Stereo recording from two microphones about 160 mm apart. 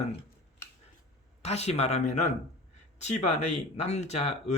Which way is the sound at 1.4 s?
40° left (ahead or behind).